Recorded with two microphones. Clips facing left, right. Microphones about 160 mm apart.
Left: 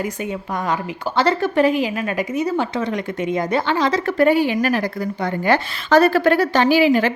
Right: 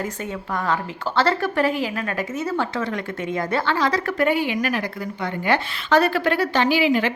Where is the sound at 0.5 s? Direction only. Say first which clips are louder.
Even; 15° left (ahead or behind).